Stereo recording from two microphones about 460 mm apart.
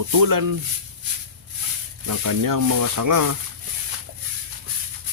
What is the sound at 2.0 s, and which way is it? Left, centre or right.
Speech, right.